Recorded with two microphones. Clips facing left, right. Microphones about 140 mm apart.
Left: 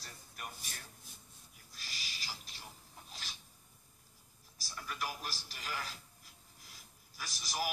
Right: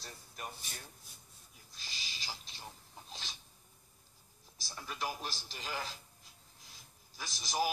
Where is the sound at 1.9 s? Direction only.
25° right (ahead or behind).